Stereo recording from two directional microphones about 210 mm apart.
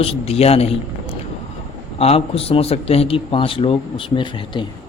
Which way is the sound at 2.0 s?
30° left (ahead or behind).